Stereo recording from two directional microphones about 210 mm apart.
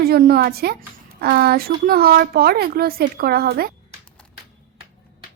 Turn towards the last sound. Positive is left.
turn(degrees=-45)  # may be behind; listen again after turning